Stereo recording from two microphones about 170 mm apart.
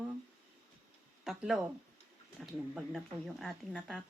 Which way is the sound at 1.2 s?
Centre (ahead or behind).